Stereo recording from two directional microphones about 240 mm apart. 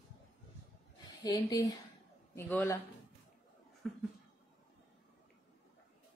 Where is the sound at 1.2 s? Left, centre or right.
Centre.